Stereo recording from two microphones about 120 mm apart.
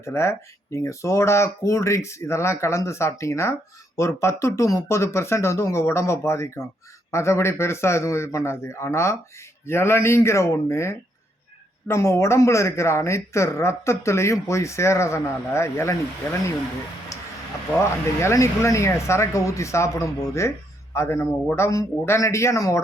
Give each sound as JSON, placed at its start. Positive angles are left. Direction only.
{"t": 0.0, "sound": "speech", "side_deg": 20}
{"t": 17.1, "sound": "a sound", "side_deg": 25}
{"t": 17.7, "sound": "speech", "side_deg": 25}